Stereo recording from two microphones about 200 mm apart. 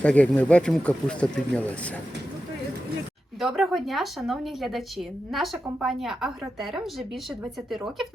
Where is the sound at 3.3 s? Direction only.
Centre (ahead or behind).